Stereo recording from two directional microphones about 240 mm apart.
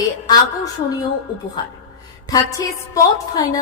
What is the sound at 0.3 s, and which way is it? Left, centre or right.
Speech, centre.